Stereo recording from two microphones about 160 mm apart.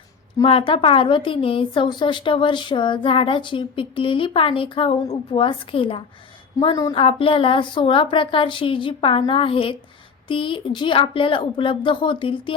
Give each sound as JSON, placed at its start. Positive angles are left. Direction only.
{"t": 0.4, "sound": "a woman's voice", "side_deg": 35}
{"t": 6.9, "sound": "a woman's voice", "side_deg": 35}